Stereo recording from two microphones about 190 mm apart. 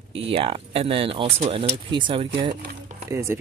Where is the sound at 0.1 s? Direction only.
30° right (ahead or behind).